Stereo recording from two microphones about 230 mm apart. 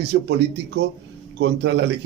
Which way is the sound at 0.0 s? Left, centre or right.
Right.